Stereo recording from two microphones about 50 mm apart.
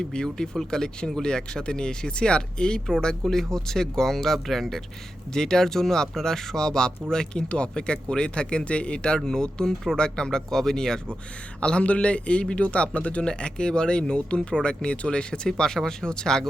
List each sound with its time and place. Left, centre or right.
0.0 s a man's voice: centre